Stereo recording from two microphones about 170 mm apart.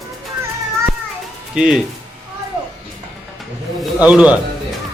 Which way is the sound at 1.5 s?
5° right (ahead or behind).